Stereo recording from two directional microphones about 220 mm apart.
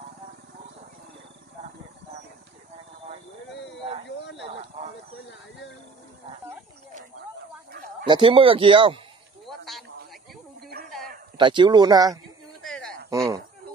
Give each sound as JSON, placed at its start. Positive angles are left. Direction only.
{"t": 8.1, "sound": "speech", "side_deg": -25}
{"t": 9.7, "sound": "snake", "side_deg": 0}
{"t": 11.3, "sound": "speech", "side_deg": -20}
{"t": 12.6, "sound": "a sound", "side_deg": 0}
{"t": 13.1, "sound": "speech", "side_deg": -15}